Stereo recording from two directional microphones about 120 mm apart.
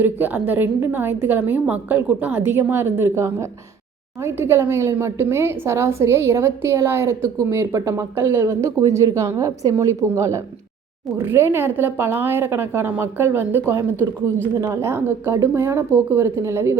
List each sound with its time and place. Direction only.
0.0 s a woman's voice: 15° right (ahead or behind)